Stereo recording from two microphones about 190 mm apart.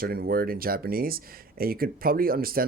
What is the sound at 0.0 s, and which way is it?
Speech, 50° right (ahead or behind).